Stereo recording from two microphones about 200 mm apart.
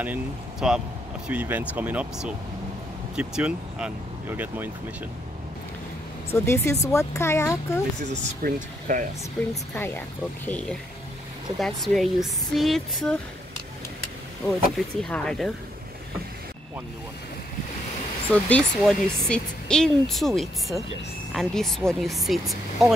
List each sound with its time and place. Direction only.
0.0 s speech: 5° right (ahead or behind)
6.3 s speech: 15° left (ahead or behind)
8.1 s speech: 45° right (ahead or behind)
9.8 s speech: 10° left (ahead or behind)
15.0 s speech: 5° left (ahead or behind)
18.3 s speech: 5° left (ahead or behind)